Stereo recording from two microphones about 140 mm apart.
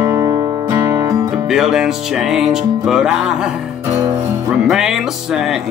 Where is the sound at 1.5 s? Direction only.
Centre (ahead or behind).